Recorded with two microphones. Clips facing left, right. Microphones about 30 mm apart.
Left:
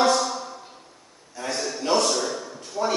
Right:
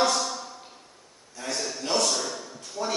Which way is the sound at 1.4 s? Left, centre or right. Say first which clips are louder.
Left 4 dB; centre.